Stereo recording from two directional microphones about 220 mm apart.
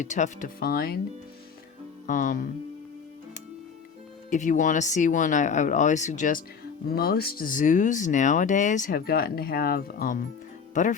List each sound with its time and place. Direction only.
0.0 s speech: 35° left (ahead or behind)
2.0 s speech: 35° left (ahead or behind)
4.3 s speech: 35° left (ahead or behind)